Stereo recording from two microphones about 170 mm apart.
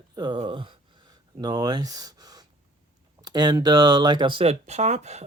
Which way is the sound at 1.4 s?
25° right (ahead or behind).